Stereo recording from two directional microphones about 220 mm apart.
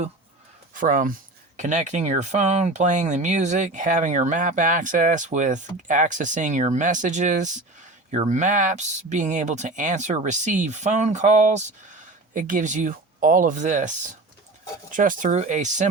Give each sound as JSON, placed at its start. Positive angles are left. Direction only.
{"t": 0.7, "sound": "speech", "side_deg": -35}